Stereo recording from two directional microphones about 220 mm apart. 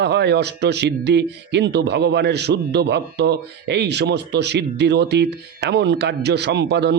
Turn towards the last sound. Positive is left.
turn(degrees=-50)  # may be behind; listen again after turning